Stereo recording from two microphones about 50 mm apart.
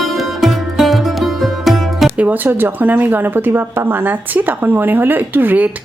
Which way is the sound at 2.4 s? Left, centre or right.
Right.